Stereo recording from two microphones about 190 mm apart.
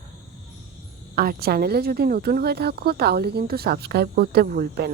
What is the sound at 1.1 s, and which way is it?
Speech, 50° right (ahead or behind).